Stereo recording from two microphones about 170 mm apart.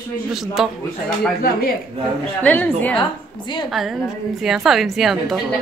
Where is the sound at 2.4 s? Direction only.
10° left (ahead or behind).